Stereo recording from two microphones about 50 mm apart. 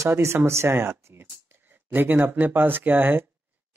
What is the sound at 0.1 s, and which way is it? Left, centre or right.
Speech, right.